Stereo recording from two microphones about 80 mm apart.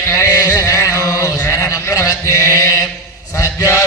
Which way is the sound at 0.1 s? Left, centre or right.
Left.